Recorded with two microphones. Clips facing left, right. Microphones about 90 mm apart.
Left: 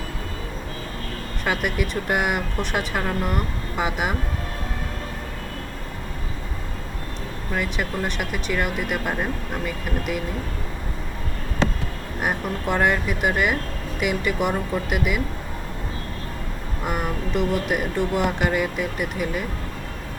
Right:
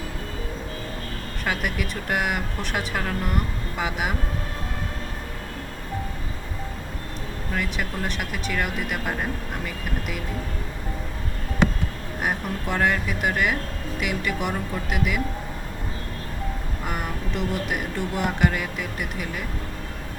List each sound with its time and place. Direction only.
1.5 s speech: centre (ahead or behind)
7.5 s speech: centre (ahead or behind)
12.2 s speech: 5° left (ahead or behind)
16.8 s speech: centre (ahead or behind)